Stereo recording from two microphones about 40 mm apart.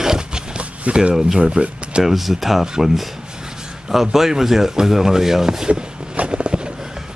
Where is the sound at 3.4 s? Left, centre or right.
Centre.